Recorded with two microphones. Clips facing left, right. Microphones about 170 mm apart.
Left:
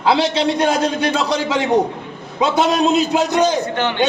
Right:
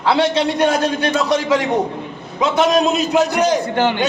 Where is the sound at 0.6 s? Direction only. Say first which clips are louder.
Even; 25° left (ahead or behind).